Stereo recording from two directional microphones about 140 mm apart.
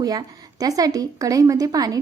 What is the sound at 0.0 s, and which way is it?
A woman's voice, 30° right (ahead or behind).